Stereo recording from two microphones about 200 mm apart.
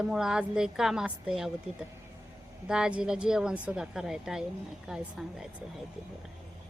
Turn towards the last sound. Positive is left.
turn(degrees=-5)  # may be behind; listen again after turning